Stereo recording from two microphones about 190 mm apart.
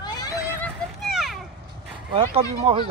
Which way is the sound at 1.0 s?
Centre (ahead or behind).